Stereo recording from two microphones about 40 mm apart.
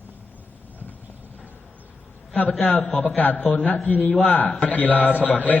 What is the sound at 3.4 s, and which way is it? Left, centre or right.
A man's voice, left.